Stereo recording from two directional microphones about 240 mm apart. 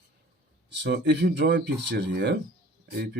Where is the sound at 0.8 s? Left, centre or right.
Right.